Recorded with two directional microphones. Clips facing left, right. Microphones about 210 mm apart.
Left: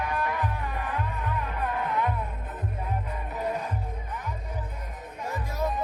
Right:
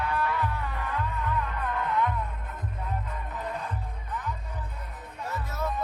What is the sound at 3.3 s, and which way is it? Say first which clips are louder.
Music: left 5 dB; 10° left (ahead or behind).